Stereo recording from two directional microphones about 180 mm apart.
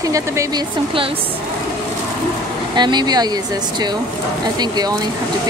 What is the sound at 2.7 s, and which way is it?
Speech, 25° right (ahead or behind).